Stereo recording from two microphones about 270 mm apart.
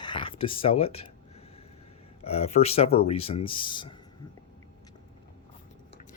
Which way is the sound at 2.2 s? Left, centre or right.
Left.